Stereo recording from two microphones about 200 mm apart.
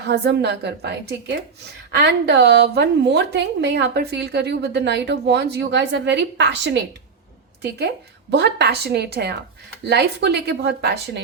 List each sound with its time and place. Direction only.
0.1 s a woman's voice: 55° right (ahead or behind)
8.3 s a woman's voice: 60° right (ahead or behind)